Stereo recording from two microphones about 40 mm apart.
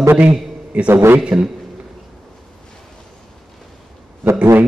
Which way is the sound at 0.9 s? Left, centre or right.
Right.